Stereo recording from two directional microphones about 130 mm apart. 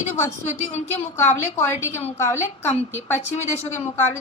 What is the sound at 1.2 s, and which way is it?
A woman's voice, 20° left (ahead or behind).